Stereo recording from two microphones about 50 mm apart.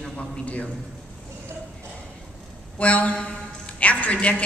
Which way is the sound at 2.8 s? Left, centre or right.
Left.